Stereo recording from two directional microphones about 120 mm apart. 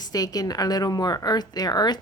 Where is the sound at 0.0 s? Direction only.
30° left (ahead or behind).